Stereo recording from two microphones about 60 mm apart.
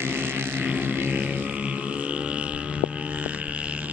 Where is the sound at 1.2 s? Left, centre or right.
Right.